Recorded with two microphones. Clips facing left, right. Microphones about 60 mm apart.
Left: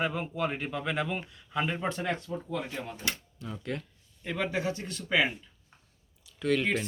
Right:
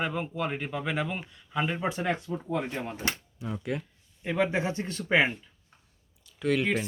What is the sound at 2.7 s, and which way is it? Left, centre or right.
Speech, right.